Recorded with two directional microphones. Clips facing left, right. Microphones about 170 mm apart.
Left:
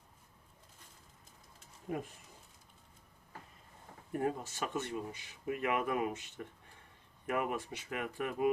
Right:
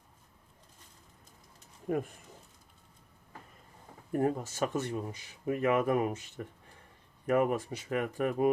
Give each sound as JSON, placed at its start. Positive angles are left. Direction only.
{"t": 1.9, "sound": "speech", "side_deg": -55}
{"t": 4.1, "sound": "speech", "side_deg": -40}